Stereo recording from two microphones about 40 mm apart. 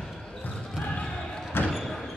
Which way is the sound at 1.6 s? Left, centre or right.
Left.